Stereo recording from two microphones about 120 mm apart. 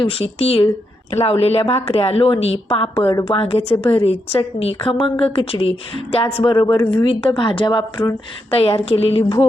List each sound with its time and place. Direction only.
0.0 s a woman's voice: 55° left (ahead or behind)
4.9 s a woman's voice: 40° left (ahead or behind)
6.9 s a woman's voice: 45° left (ahead or behind)